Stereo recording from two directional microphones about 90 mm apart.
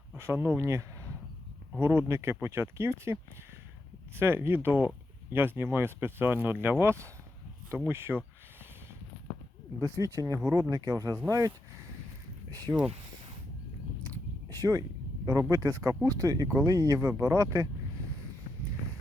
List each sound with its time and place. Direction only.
0.2 s speech: 25° right (ahead or behind)
9.8 s speech: 40° right (ahead or behind)
14.5 s speech: 45° right (ahead or behind)